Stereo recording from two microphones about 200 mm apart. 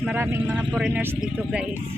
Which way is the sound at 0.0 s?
10° right (ahead or behind).